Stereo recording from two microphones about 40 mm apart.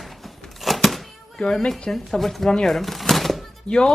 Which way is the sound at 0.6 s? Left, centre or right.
Centre.